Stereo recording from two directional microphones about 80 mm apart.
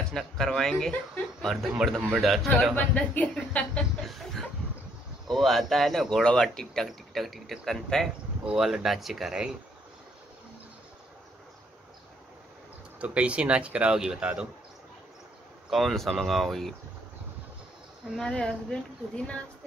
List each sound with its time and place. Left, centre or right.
0.1 s speech: centre
2.7 s speech: centre
4.0 s a sound: centre
5.3 s speech: centre
8.5 s speech: centre
13.0 s speech: centre
15.7 s speech: centre
18.2 s speech: centre